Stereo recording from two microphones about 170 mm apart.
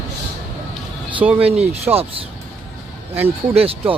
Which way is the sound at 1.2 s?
10° right (ahead or behind).